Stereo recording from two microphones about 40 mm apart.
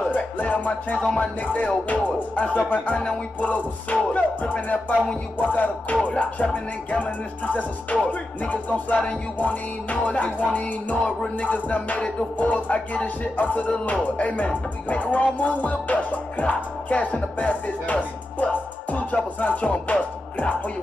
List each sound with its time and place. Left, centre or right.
0.0 s music: left